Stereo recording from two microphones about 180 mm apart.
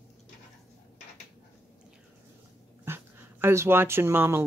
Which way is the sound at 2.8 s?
15° right (ahead or behind).